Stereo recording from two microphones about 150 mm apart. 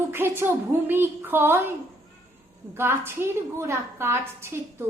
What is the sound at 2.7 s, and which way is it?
A woman's voice, 15° right (ahead or behind).